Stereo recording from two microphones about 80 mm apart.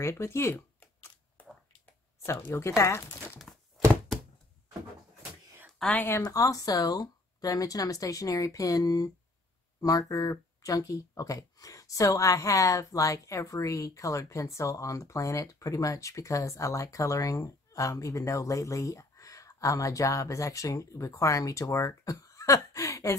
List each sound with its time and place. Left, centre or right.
0.0 s speech: left
2.2 s speech: left
5.8 s speech: centre
6.2 s speech: left